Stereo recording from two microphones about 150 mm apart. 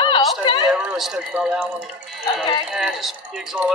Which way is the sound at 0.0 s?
30° left (ahead or behind).